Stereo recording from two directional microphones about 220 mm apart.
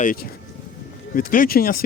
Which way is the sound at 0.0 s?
40° left (ahead or behind).